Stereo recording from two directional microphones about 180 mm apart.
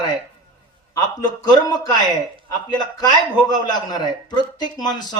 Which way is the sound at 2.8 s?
20° left (ahead or behind).